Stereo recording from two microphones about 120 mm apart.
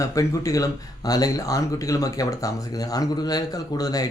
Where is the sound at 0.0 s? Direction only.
25° left (ahead or behind).